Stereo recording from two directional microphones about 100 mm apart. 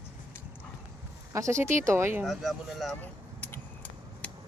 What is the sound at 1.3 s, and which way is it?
Speech, 30° right (ahead or behind).